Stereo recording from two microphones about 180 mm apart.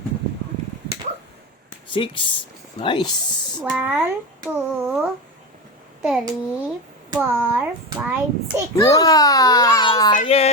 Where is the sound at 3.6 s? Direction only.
10° right (ahead or behind).